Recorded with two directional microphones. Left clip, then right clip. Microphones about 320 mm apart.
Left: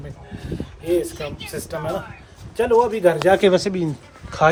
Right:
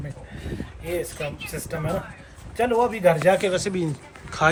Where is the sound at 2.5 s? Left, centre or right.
Centre.